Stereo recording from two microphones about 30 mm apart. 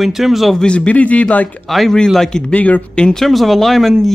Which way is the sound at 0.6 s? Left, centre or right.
Left.